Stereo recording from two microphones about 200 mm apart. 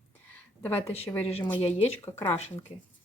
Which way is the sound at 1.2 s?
30° left (ahead or behind).